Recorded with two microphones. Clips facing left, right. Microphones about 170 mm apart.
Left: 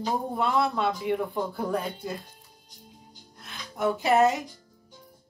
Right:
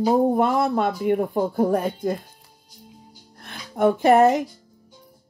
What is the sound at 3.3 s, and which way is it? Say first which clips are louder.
Music: right 5 dB; 55° right (ahead or behind).